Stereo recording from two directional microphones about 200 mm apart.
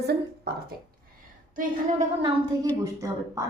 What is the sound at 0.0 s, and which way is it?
Speech, 55° right (ahead or behind).